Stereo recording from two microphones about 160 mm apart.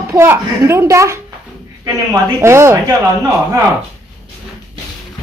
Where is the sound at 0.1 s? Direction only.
15° right (ahead or behind).